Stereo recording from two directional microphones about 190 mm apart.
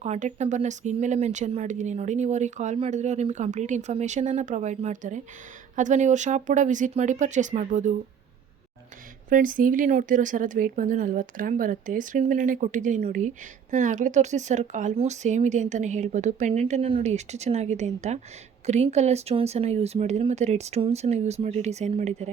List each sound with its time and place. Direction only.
0.0 s speech: 35° right (ahead or behind)
9.3 s speech: 45° right (ahead or behind)